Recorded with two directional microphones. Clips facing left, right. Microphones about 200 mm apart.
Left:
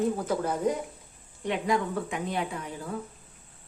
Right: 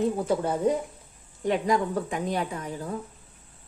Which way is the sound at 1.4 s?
40° right (ahead or behind).